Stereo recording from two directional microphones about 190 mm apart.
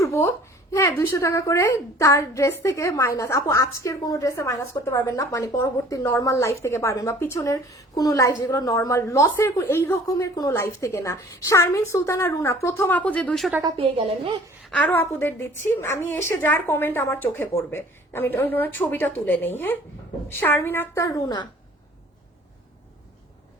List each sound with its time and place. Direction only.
0.0 s a sound: 15° left (ahead or behind)
0.7 s a woman's voice: 15° left (ahead or behind)
13.7 s a woman's voice: 25° right (ahead or behind)
14.7 s a woman's voice: 5° left (ahead or behind)